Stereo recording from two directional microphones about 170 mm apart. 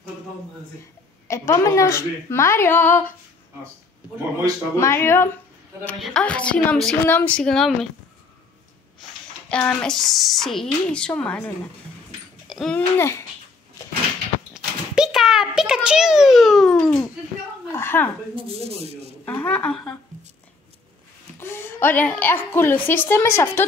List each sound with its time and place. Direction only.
1.2 s a woman's voice: 15° left (ahead or behind)
4.7 s a woman's voice: 15° left (ahead or behind)
5.9 s a woman's voice: centre (ahead or behind)
9.5 s a woman's voice: 5° left (ahead or behind)
12.4 s a sound: centre (ahead or behind)
14.5 s a sound: 5° right (ahead or behind); by 18.1 s 10° left (ahead or behind)
18.3 s speech: 35° right (ahead or behind)
19.2 s a woman's voice: 10° left (ahead or behind)
21.4 s a woman's voice: 15° left (ahead or behind)